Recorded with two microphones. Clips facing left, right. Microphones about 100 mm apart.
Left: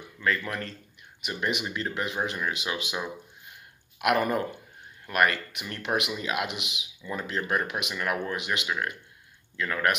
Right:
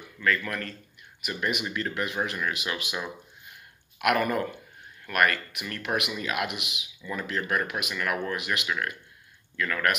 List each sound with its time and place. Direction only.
0.2 s speech: 20° left (ahead or behind)